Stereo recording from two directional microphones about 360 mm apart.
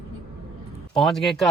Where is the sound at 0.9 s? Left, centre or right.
Centre.